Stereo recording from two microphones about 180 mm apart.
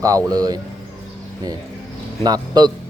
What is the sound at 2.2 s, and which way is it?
Speech, 25° right (ahead or behind).